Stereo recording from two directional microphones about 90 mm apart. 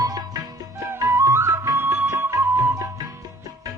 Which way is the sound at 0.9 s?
30° right (ahead or behind).